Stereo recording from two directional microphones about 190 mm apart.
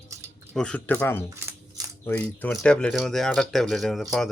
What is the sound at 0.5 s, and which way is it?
Speech, 5° left (ahead or behind).